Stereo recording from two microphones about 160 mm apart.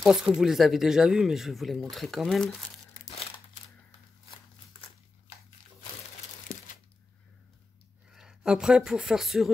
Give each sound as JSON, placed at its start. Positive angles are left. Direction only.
{"t": 0.0, "sound": "speech", "side_deg": 0}
{"t": 6.4, "sound": "a sound", "side_deg": 60}
{"t": 8.1, "sound": "speech", "side_deg": -5}